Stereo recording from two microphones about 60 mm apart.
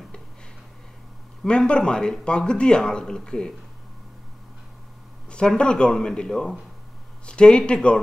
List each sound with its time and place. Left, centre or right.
1.4 s speech: centre
5.3 s speech: centre